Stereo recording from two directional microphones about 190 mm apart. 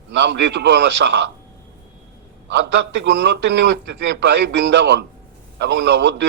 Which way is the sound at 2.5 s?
65° right (ahead or behind).